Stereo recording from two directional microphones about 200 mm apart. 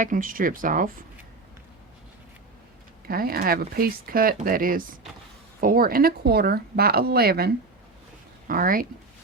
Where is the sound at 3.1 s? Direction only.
50° right (ahead or behind).